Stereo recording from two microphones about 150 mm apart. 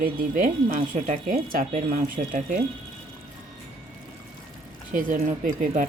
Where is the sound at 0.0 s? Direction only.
60° right (ahead or behind).